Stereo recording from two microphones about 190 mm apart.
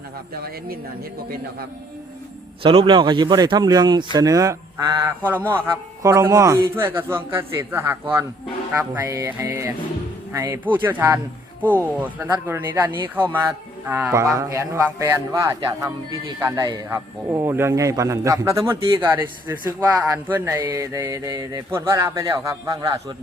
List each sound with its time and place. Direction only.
2.6 s speech: 25° right (ahead or behind)
11.6 s speech: 10° left (ahead or behind)
11.9 s speech: 10° right (ahead or behind)
13.3 s a sound: 10° right (ahead or behind)
14.3 s speech: 15° right (ahead or behind)